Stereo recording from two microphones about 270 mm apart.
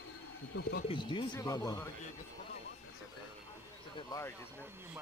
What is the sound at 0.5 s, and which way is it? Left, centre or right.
Speech, left.